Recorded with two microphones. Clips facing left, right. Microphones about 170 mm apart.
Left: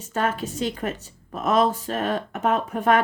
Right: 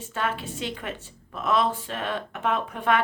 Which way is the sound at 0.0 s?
40° left (ahead or behind).